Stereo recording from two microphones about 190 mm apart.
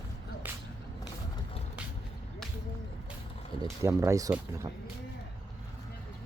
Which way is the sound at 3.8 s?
15° right (ahead or behind).